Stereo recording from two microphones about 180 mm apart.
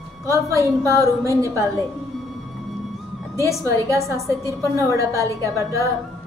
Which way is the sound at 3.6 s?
15° right (ahead or behind).